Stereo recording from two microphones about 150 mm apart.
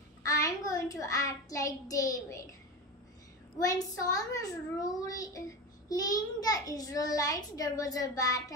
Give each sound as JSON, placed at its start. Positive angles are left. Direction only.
{"t": 0.2, "sound": "child singing", "side_deg": 20}
{"t": 3.5, "sound": "a child's voice", "side_deg": 25}